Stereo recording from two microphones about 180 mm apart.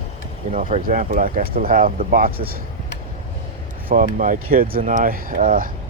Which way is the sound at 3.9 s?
50° right (ahead or behind).